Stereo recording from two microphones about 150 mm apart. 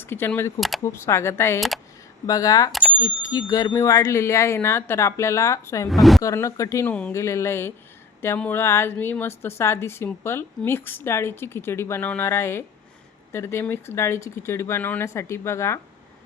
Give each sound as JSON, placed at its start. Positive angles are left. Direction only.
{"t": 0.0, "sound": "a woman's voice", "side_deg": 15}
{"t": 5.9, "sound": "a woman's voice", "side_deg": 0}
{"t": 6.2, "sound": "speech", "side_deg": 20}
{"t": 6.8, "sound": "a woman's voice", "side_deg": 10}